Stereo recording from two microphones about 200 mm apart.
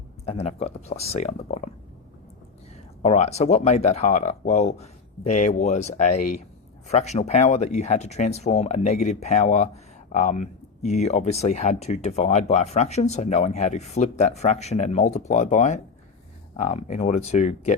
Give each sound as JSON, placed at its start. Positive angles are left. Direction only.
{"t": 0.3, "sound": "speech", "side_deg": 35}
{"t": 2.7, "sound": "speech", "side_deg": 30}